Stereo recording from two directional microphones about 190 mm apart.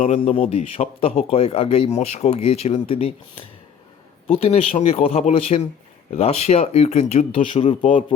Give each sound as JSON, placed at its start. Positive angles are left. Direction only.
{"t": 0.0, "sound": "speech", "side_deg": 35}